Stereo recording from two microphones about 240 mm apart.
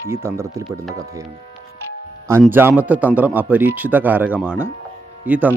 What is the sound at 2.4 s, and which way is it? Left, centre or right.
Speech, centre.